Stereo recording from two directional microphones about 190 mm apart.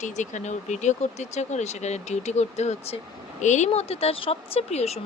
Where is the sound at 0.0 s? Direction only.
40° left (ahead or behind).